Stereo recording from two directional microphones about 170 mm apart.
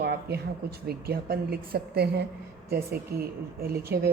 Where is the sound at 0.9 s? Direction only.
65° right (ahead or behind).